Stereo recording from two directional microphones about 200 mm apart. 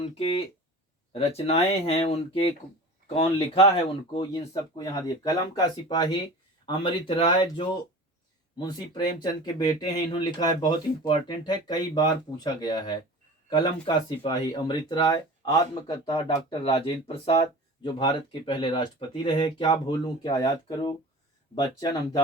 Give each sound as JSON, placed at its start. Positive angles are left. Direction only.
{"t": 0.0, "sound": "speech", "side_deg": 30}